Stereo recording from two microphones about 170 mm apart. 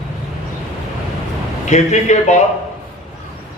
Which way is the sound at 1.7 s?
45° left (ahead or behind).